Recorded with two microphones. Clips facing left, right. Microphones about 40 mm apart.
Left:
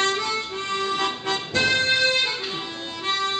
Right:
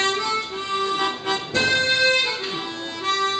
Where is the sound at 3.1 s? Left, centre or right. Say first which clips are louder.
Right 3 dB; centre.